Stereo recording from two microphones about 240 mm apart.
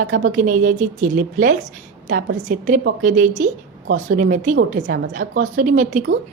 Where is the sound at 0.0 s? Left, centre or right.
Right.